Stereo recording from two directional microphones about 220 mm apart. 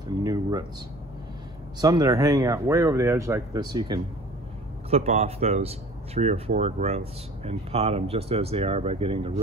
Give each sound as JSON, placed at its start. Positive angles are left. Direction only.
{"t": 0.2, "sound": "speech", "side_deg": -15}
{"t": 1.8, "sound": "speech", "side_deg": -15}